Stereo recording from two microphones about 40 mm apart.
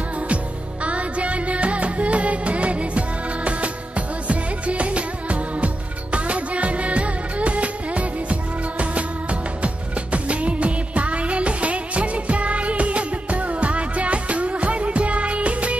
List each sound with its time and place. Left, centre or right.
0.8 s music: right
6.1 s music of bollywood: right
10.1 s music: right